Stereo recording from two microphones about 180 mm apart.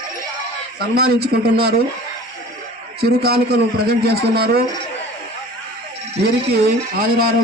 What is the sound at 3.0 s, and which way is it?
A man's voice, 60° right (ahead or behind).